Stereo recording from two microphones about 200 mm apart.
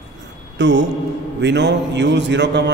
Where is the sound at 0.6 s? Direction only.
60° right (ahead or behind).